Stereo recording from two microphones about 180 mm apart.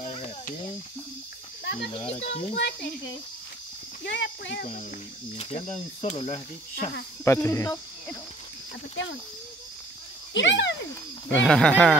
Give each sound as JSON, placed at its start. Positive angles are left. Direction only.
{"t": 0.0, "sound": "cricket", "side_deg": 40}
{"t": 1.6, "sound": "snake", "side_deg": 70}
{"t": 2.0, "sound": "speech", "side_deg": 35}
{"t": 2.5, "sound": "a child's voice", "side_deg": 70}
{"t": 4.0, "sound": "speech", "side_deg": 75}
{"t": 5.4, "sound": "speech", "side_deg": 35}
{"t": 7.2, "sound": "speech", "side_deg": 15}
{"t": 10.3, "sound": "speech", "side_deg": 85}
{"t": 11.4, "sound": "speech", "side_deg": 5}